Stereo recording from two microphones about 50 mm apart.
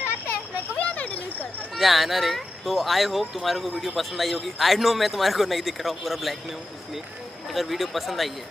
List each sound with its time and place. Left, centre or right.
0.7 s a sound: left
1.8 s speech: centre
7.5 s speech: centre